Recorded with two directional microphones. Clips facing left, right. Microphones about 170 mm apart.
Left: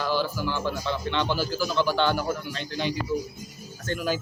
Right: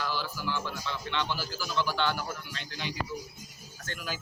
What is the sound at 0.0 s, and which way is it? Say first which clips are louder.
Speech: left 8 dB; 30° left (ahead or behind).